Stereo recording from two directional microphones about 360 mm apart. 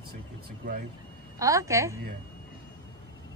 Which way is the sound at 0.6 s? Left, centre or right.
Right.